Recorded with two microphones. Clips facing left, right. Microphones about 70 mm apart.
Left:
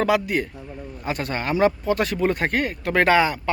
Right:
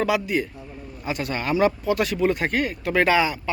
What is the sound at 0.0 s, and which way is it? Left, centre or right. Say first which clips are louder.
Speech: left 2 dB; left.